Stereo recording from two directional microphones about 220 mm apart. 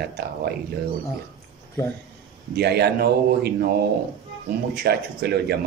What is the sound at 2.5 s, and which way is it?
A man's voice, 50° right (ahead or behind).